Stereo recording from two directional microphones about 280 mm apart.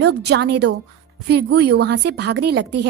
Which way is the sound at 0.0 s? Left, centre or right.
Right.